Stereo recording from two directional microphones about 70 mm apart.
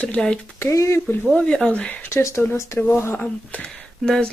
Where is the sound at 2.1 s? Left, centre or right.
Left.